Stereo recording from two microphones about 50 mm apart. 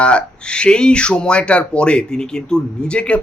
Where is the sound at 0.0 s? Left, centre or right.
Left.